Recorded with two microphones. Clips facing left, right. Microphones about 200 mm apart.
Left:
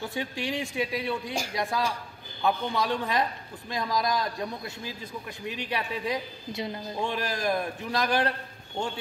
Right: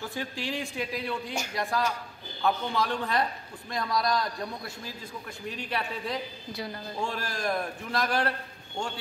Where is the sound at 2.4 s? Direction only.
20° left (ahead or behind).